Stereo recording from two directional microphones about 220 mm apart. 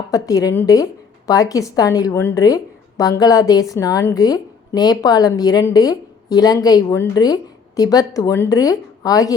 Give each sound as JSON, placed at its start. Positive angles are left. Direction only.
{"t": 0.1, "sound": "a woman's voice", "side_deg": 15}